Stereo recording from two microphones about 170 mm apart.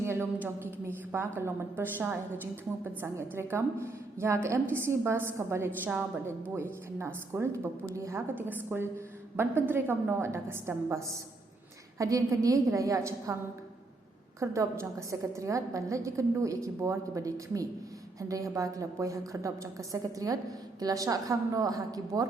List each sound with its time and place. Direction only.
0.0 s a woman's voice: 15° right (ahead or behind)
14.3 s a woman's voice: 15° right (ahead or behind)